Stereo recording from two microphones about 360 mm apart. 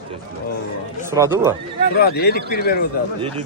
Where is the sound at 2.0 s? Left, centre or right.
Left.